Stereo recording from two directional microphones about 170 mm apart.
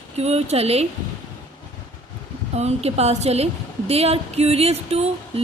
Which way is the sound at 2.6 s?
40° right (ahead or behind).